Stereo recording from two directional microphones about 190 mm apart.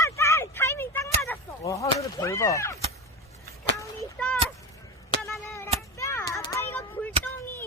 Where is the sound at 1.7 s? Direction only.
15° left (ahead or behind).